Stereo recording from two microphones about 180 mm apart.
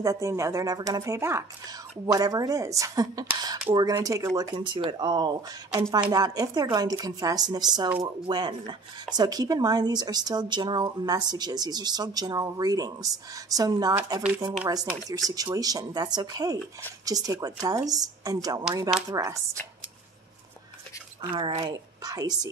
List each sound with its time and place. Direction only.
0.0 s speech: 15° right (ahead or behind)
21.2 s speech: 30° right (ahead or behind)